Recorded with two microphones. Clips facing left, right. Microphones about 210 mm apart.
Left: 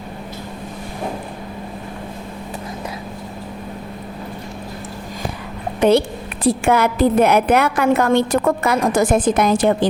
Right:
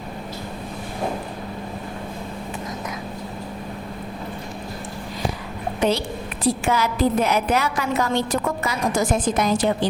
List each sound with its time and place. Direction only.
6.4 s a woman's voice: 55° left (ahead or behind)